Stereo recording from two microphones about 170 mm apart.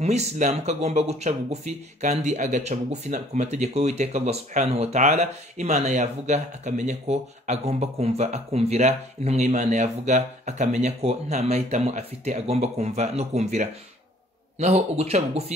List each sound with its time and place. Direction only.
0.0 s speech: 40° right (ahead or behind)